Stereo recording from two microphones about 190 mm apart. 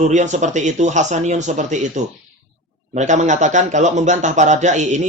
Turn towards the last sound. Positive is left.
turn(degrees=-40)  # may be behind; listen again after turning